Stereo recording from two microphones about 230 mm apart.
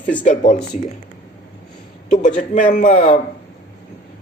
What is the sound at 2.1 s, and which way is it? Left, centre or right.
A man's voice, left.